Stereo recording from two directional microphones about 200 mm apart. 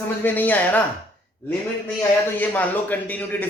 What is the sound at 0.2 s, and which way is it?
Speech, 10° left (ahead or behind).